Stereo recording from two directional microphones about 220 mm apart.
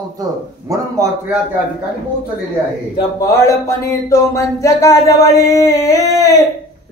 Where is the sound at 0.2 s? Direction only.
15° right (ahead or behind).